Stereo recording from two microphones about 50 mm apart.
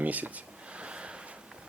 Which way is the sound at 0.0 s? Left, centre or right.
Right.